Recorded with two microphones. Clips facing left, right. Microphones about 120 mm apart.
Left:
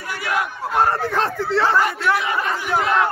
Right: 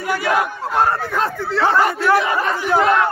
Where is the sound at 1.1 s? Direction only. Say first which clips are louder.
Even; 30° left (ahead or behind).